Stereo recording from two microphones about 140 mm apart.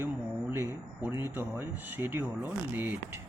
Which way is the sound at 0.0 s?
15° right (ahead or behind).